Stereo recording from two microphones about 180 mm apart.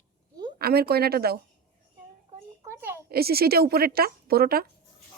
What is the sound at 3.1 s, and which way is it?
A woman's voice, 60° right (ahead or behind).